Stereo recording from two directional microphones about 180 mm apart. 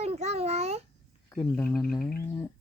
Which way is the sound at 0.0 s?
35° right (ahead or behind).